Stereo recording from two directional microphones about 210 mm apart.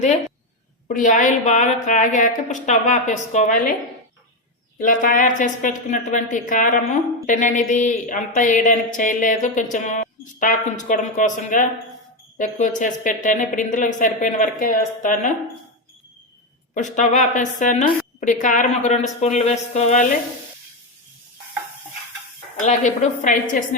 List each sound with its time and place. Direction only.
0.9 s a woman's voice: 40° left (ahead or behind)
4.8 s a woman's voice: 40° left (ahead or behind)
16.7 s a woman's voice: 35° left (ahead or behind)
22.6 s a woman's voice: 35° left (ahead or behind)